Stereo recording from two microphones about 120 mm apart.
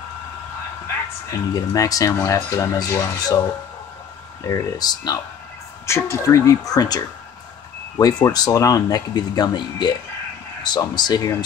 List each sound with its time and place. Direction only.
1.3 s speech: 30° left (ahead or behind)
4.5 s speech: 30° left (ahead or behind)
8.0 s speech: 35° left (ahead or behind)